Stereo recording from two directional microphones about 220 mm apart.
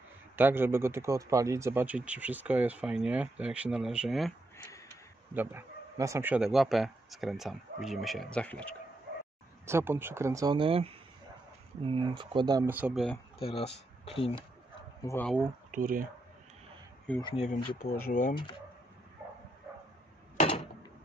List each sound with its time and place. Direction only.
0.4 s speech: 10° right (ahead or behind)
5.3 s speech: 10° right (ahead or behind)
9.7 s speech: 10° right (ahead or behind)
13.4 s speech: 25° left (ahead or behind)
15.0 s speech: 10° left (ahead or behind)
15.7 s speech: 40° right (ahead or behind)
17.2 s speech: 25° left (ahead or behind)
17.7 s speech: 40° left (ahead or behind)
20.3 s a sound: 25° left (ahead or behind)